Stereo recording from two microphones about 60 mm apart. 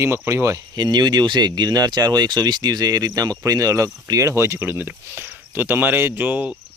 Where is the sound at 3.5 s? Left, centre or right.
Right.